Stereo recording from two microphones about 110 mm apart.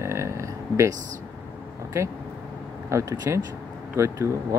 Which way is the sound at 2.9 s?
25° right (ahead or behind).